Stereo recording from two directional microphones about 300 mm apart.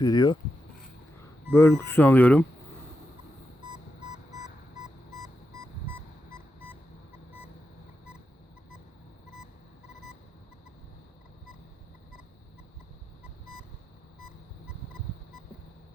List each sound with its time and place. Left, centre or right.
0.0 s speech: centre
1.5 s speech: centre
4.4 s a sound: centre